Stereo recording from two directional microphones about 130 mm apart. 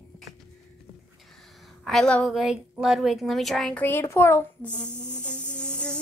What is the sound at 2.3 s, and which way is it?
Speech, 5° right (ahead or behind).